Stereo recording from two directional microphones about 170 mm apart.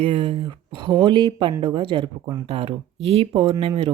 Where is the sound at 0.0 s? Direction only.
30° right (ahead or behind).